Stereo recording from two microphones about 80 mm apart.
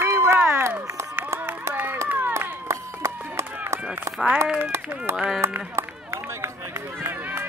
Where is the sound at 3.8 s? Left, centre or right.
Centre.